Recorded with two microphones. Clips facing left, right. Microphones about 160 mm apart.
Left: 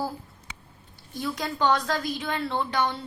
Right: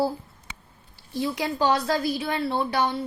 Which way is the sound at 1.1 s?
30° right (ahead or behind).